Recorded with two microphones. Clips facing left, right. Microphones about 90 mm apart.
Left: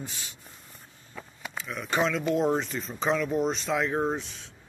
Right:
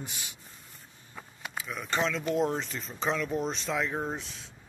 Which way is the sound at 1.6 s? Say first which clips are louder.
Left 3 dB; centre (ahead or behind).